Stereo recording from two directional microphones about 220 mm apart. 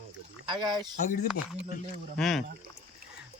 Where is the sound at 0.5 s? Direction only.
20° right (ahead or behind).